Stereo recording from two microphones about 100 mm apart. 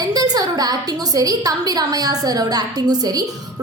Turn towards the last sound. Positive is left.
turn(degrees=-40)  # may be behind; listen again after turning